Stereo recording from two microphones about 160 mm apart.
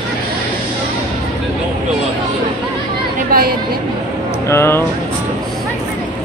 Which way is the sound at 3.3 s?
70° right (ahead or behind).